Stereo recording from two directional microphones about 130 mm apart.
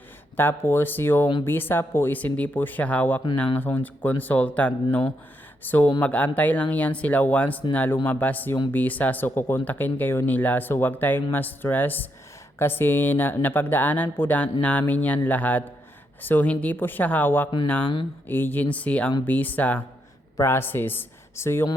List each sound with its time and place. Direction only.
0.3 s speech: 15° left (ahead or behind)